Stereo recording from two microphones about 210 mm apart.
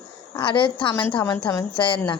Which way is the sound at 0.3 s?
20° left (ahead or behind).